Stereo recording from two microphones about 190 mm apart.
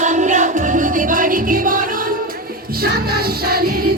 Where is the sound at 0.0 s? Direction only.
40° right (ahead or behind).